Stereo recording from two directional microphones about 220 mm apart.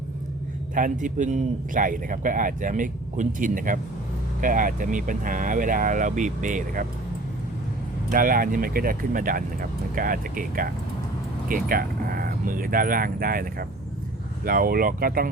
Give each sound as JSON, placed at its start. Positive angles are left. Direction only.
{"t": 0.7, "sound": "a man's voice", "side_deg": -35}
{"t": 8.1, "sound": "a man's voice", "side_deg": -40}